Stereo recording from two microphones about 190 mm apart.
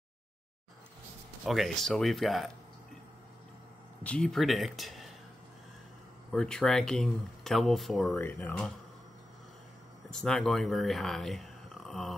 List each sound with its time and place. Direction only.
1.4 s speech: centre (ahead or behind)
4.0 s speech: 5° left (ahead or behind)
6.3 s speech: 5° left (ahead or behind)
10.1 s speech: 5° left (ahead or behind)